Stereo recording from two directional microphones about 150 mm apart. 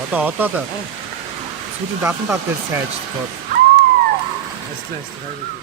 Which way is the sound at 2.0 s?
15° right (ahead or behind).